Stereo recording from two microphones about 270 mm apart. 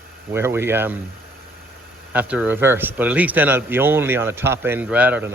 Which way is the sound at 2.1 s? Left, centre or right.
Centre.